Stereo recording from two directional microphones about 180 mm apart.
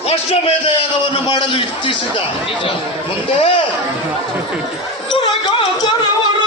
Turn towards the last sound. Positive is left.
turn(degrees=25)  # may be behind; listen again after turning